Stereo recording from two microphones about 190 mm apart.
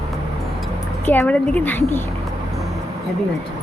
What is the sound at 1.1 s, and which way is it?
Speech, 10° left (ahead or behind).